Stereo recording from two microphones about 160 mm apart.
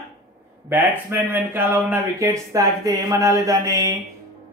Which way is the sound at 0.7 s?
15° right (ahead or behind).